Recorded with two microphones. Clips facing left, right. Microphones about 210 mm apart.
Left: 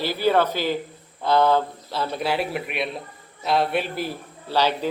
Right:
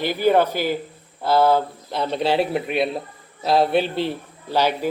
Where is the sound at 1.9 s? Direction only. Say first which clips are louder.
Right 4 dB; 20° right (ahead or behind).